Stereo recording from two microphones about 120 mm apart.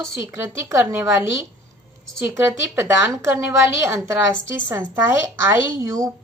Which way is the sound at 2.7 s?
20° right (ahead or behind).